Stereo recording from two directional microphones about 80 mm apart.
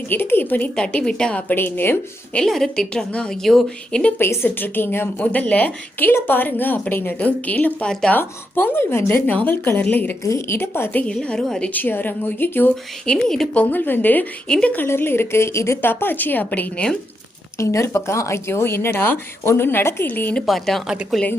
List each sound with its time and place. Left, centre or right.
0.1 s a woman's voice: left
0.8 s a woman's voice: centre
2.3 s a woman's voice: centre
4.2 s a woman's voice: left
10.2 s a woman's voice: left
11.0 s a woman's voice: centre
11.7 s a woman's voice: left
13.1 s a woman's voice: centre
13.6 s a woman's voice: left
14.8 s a woman's voice: left; by 17.0 s centre
17.6 s a woman's voice: left
20.5 s a woman's voice: centre
20.8 s a woman's voice: centre